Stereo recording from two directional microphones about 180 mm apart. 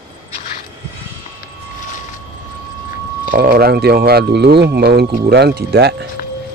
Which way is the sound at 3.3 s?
55° right (ahead or behind).